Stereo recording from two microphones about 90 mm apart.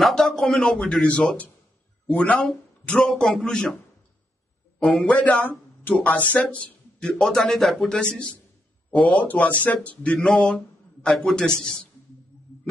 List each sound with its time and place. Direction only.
0.0 s a man's voice: 5° left (ahead or behind)
4.7 s a man's voice: 5° left (ahead or behind)
5.0 s a man's voice: 20° left (ahead or behind)
10.1 s a man's voice: 5° left (ahead or behind)